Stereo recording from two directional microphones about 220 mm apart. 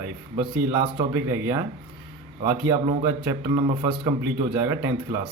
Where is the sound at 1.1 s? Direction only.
15° right (ahead or behind).